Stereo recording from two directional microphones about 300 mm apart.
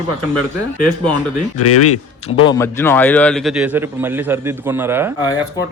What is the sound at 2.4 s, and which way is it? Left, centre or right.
A man's voice, centre.